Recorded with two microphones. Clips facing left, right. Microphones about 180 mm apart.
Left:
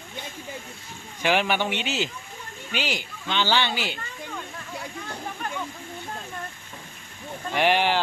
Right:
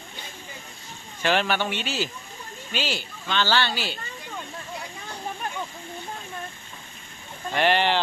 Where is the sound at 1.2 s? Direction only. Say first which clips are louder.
Even; 15° left (ahead or behind).